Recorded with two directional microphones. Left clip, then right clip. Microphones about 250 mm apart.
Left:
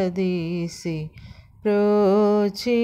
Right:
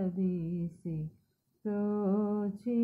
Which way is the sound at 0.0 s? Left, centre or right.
Left.